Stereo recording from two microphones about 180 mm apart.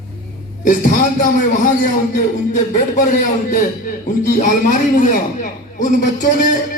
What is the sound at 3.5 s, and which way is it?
A man's voice, 45° left (ahead or behind).